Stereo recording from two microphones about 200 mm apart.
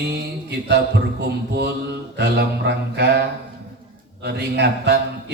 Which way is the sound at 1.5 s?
55° right (ahead or behind).